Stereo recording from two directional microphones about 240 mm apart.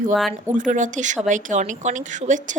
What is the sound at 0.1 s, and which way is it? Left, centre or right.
Speech, centre.